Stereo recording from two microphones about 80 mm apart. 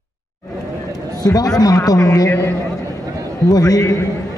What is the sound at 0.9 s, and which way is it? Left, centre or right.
A man's voice, left.